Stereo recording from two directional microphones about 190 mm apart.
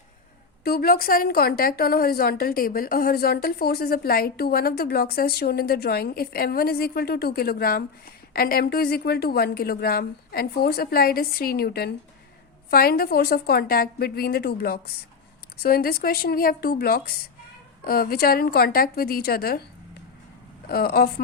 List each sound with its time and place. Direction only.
0.6 s a woman's voice: 55° left (ahead or behind)
20.7 s a woman's voice: 50° left (ahead or behind)